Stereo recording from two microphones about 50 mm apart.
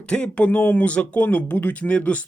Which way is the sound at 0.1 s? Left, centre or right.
Left.